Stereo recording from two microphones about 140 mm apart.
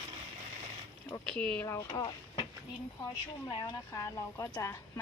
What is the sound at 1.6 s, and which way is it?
Speech, 25° left (ahead or behind).